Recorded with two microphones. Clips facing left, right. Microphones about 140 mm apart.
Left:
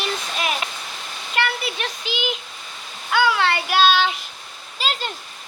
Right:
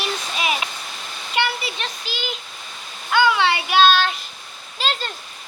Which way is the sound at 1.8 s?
15° left (ahead or behind).